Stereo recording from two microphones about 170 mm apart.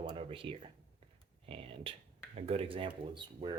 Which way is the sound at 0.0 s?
30° right (ahead or behind).